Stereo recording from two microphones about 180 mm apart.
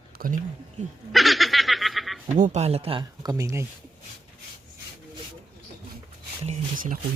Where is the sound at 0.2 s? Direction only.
60° right (ahead or behind).